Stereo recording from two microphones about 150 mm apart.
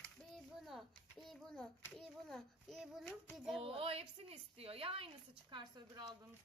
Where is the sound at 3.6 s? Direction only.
40° right (ahead or behind).